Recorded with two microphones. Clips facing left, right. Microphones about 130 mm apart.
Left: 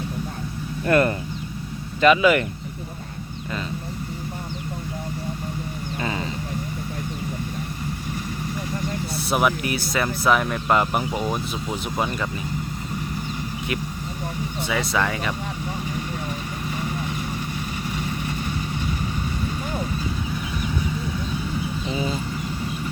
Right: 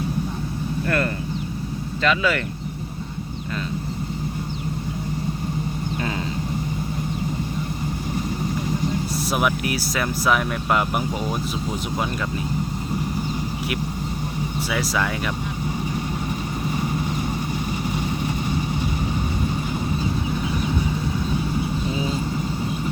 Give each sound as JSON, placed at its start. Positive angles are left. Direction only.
{"t": 0.9, "sound": "speech", "side_deg": 20}
{"t": 9.3, "sound": "speech", "side_deg": 0}
{"t": 14.7, "sound": "speech", "side_deg": -5}